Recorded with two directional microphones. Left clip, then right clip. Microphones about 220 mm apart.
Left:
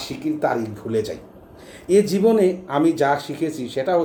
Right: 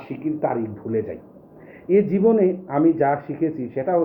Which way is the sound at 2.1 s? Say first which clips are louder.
Left 1 dB; 10° left (ahead or behind).